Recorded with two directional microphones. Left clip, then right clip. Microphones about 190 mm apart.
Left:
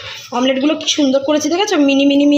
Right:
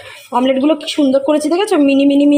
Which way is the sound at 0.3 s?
5° right (ahead or behind).